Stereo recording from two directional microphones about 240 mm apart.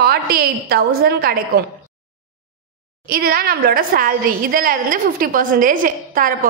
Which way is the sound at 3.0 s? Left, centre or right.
Right.